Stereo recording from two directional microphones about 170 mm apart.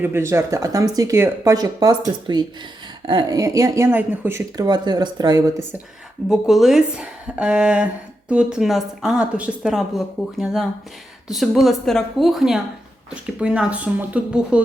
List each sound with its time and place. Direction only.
0.0 s speech: 15° right (ahead or behind)
6.2 s a woman's voice: centre (ahead or behind)